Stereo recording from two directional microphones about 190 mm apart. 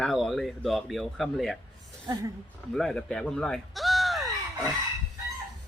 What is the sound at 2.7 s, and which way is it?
Speech, centre (ahead or behind).